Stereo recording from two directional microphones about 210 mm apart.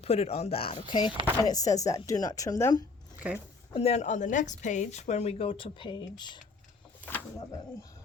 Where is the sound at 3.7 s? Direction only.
30° left (ahead or behind).